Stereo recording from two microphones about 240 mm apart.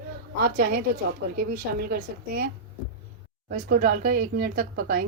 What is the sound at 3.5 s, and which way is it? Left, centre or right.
Speech, right.